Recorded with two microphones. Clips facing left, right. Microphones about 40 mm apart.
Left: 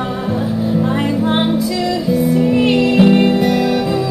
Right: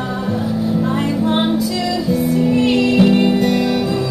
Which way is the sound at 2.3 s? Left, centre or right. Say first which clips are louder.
Even; centre.